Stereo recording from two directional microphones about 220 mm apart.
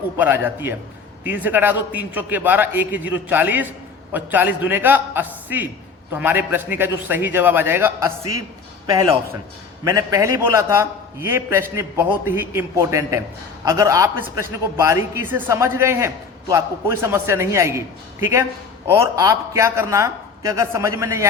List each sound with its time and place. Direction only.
0.4 s a man's voice: 10° right (ahead or behind)